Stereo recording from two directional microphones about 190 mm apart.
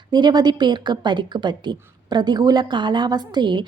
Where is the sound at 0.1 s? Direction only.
20° right (ahead or behind).